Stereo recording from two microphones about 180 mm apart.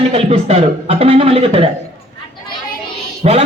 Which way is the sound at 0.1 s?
35° right (ahead or behind).